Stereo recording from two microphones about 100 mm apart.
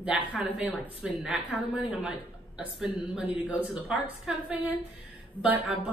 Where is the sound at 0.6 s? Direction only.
15° right (ahead or behind).